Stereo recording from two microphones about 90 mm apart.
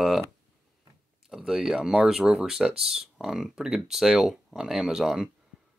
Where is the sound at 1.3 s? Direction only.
5° right (ahead or behind).